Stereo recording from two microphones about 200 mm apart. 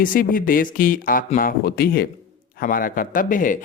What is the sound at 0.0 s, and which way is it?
Speech, 45° left (ahead or behind).